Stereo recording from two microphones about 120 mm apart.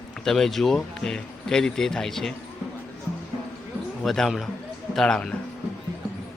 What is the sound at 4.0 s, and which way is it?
Speech, 5° left (ahead or behind).